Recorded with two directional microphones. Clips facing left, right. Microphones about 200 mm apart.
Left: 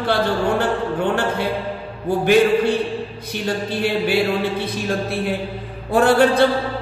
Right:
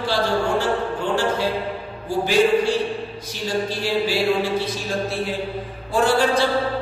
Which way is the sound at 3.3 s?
60° left (ahead or behind).